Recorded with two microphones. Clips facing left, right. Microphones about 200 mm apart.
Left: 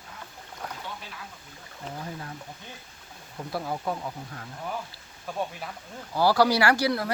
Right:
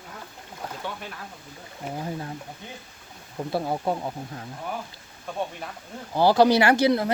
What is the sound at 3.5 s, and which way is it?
Speech, 25° right (ahead or behind).